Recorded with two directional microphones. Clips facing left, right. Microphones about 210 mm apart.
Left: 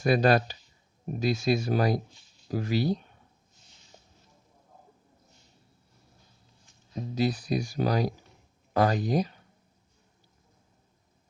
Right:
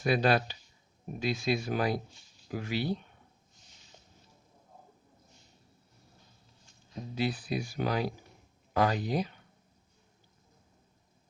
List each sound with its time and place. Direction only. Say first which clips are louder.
0.0 s speech: left 4 dB; 45° left (ahead or behind)
7.2 s speech: left 5 dB; 45° left (ahead or behind)